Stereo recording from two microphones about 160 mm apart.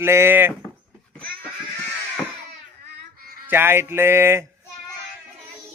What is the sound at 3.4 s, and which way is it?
Speech, 15° right (ahead or behind).